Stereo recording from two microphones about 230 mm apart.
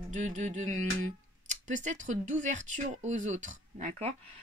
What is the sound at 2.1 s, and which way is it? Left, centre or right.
Speech, right.